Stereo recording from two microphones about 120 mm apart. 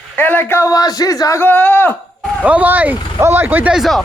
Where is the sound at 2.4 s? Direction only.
10° right (ahead or behind).